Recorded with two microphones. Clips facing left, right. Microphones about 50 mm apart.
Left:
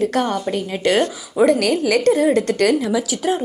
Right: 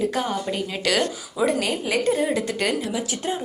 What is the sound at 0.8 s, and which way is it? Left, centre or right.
Speech, left.